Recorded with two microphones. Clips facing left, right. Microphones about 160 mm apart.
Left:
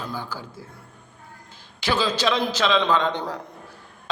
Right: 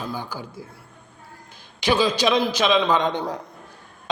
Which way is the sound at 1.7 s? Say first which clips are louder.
Right 3 dB; 15° right (ahead or behind).